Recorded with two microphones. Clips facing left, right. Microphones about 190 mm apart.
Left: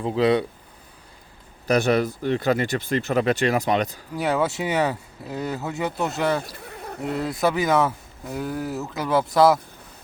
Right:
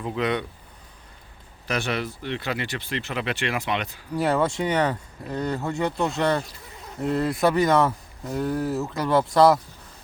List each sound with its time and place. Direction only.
0.0 s speech: 30° left (ahead or behind)
1.6 s speech: 40° left (ahead or behind)
4.1 s speech: centre (ahead or behind)
6.6 s a sound: 60° left (ahead or behind)
7.0 s speech: centre (ahead or behind)